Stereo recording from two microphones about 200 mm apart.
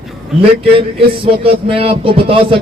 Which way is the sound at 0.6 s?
25° right (ahead or behind).